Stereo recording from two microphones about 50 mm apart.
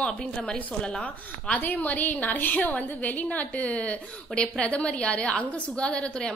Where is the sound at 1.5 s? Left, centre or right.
Left.